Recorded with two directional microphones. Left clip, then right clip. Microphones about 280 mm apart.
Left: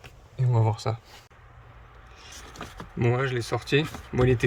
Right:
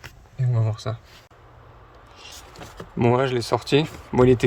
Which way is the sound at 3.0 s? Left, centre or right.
Centre.